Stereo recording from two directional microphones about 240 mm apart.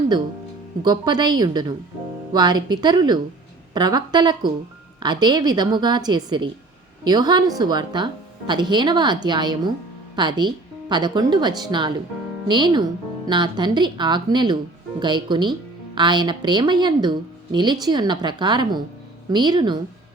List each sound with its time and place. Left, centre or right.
0.8 s a woman's voice: centre